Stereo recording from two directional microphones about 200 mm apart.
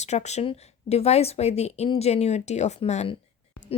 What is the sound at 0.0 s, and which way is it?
A woman's voice, 35° left (ahead or behind).